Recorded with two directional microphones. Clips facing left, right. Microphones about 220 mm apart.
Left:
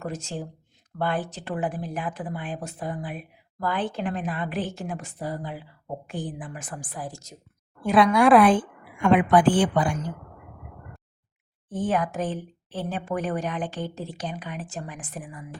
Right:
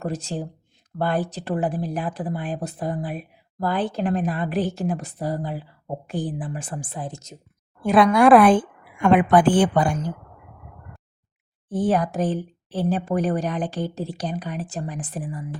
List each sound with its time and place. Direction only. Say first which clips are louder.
0.0 s speech: right 4 dB; 35° right (ahead or behind)
7.9 s a woman's voice: right 3 dB; 50° right (ahead or behind)
11.7 s speech: right 4 dB; 35° right (ahead or behind)